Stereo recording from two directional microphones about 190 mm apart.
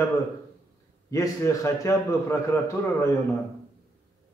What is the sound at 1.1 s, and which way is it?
A man's voice, 20° left (ahead or behind).